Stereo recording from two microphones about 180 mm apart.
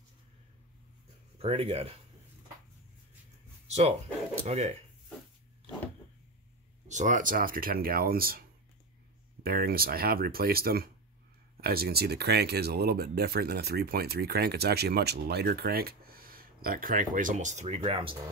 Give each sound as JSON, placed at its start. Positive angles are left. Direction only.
{"t": 1.4, "sound": "speech", "side_deg": -35}
{"t": 3.6, "sound": "dog", "side_deg": -35}
{"t": 4.5, "sound": "speech", "side_deg": -40}
{"t": 6.9, "sound": "speech", "side_deg": -45}